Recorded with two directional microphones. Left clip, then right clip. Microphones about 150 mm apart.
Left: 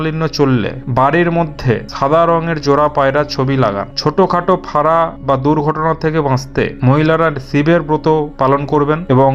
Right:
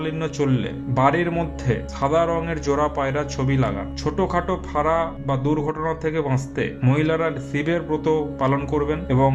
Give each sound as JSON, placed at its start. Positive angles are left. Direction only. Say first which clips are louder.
{"t": 0.0, "sound": "a man's voice", "louder": "left 9 dB", "side_deg": 25}